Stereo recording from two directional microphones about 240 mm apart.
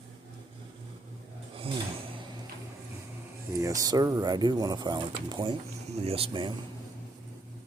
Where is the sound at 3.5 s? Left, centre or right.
Centre.